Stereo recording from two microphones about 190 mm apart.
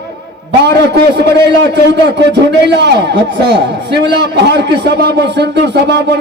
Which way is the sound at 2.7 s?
65° right (ahead or behind).